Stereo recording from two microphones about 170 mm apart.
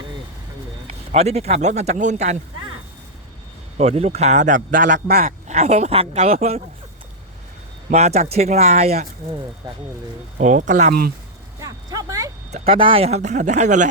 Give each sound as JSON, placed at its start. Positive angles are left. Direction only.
{"t": 1.1, "sound": "speech", "side_deg": -40}
{"t": 3.8, "sound": "speech", "side_deg": -40}
{"t": 4.9, "sound": "speech", "side_deg": -65}
{"t": 5.5, "sound": "speech", "side_deg": -40}
{"t": 7.9, "sound": "speech", "side_deg": -40}
{"t": 10.3, "sound": "speech", "side_deg": -45}
{"t": 11.6, "sound": "a sound", "side_deg": -20}
{"t": 12.5, "sound": "speech", "side_deg": -40}